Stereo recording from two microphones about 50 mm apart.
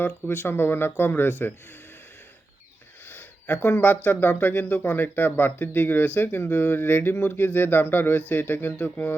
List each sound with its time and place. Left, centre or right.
0.0 s speech: left
3.1 s speech: left